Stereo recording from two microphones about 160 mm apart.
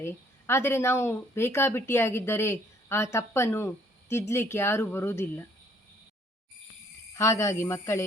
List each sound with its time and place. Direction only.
0.0 s speech: 15° left (ahead or behind)
7.1 s speech: 20° left (ahead or behind)